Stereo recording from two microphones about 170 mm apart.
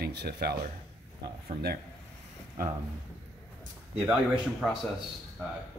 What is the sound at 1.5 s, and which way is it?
Speech, 30° right (ahead or behind).